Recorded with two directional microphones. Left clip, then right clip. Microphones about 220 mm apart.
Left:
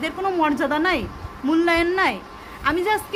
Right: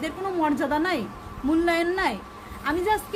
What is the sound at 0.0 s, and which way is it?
A woman's voice, 5° left (ahead or behind).